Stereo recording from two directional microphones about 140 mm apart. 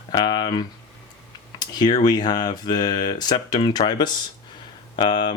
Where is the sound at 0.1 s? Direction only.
30° left (ahead or behind).